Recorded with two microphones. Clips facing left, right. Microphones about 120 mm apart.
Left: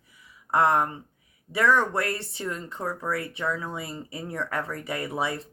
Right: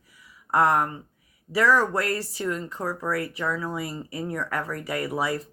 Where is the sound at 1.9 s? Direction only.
25° left (ahead or behind).